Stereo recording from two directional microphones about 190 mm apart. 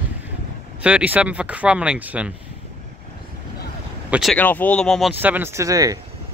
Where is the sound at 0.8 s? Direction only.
5° right (ahead or behind).